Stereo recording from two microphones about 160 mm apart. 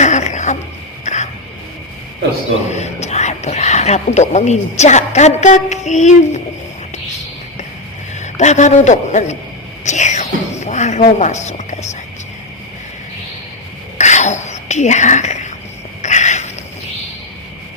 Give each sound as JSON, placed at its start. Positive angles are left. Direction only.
{"t": 0.0, "sound": "a sound", "side_deg": 50}
{"t": 2.7, "sound": "speech", "side_deg": 45}
{"t": 8.1, "sound": "a man's voice", "side_deg": 45}
{"t": 9.8, "sound": "whispering", "side_deg": 50}
{"t": 11.4, "sound": "speech", "side_deg": 45}
{"t": 14.0, "sound": "whispering", "side_deg": 45}
{"t": 16.0, "sound": "a sound", "side_deg": 50}